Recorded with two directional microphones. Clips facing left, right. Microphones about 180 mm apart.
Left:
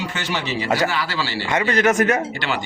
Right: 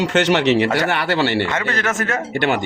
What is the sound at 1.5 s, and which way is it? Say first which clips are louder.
Speech: left 4 dB; 15° left (ahead or behind).